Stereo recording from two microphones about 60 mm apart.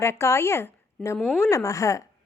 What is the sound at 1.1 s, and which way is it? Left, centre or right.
Speech, centre.